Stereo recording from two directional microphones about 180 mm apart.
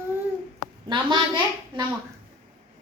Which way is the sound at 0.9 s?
25° right (ahead or behind).